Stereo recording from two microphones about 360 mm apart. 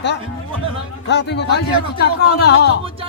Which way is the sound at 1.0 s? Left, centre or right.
Left.